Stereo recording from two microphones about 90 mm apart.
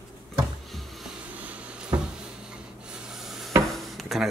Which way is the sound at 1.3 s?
15° right (ahead or behind).